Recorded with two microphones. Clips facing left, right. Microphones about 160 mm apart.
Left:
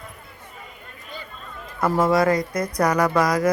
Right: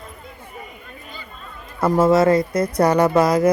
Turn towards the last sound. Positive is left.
turn(degrees=-25)  # may be behind; listen again after turning